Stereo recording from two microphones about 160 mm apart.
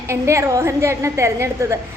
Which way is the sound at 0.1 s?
15° right (ahead or behind).